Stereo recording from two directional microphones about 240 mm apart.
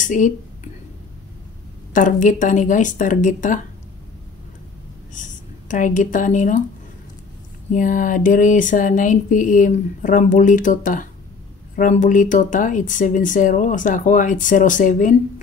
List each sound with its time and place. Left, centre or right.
0.0 s a woman's voice: left
2.0 s speech: left
5.1 s speech: left
7.7 s speech: left